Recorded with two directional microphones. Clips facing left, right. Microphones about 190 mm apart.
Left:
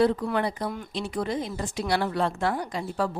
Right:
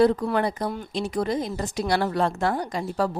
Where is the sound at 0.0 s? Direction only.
40° right (ahead or behind).